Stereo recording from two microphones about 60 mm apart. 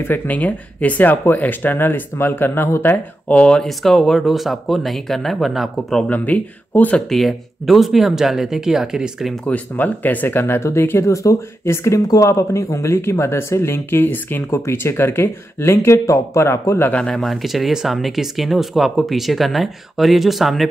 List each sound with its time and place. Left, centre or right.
0.0 s speech: left
3.3 s speech: left
3.5 s speech: centre
6.0 s speech: left
7.1 s speech: centre
9.5 s speech: left
11.1 s speech: left
14.5 s speech: left
17.1 s speech: centre